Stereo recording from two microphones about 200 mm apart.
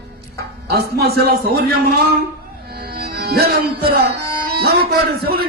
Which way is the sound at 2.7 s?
50° right (ahead or behind).